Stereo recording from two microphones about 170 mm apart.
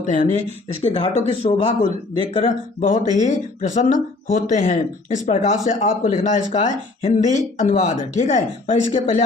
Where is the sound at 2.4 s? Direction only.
45° left (ahead or behind).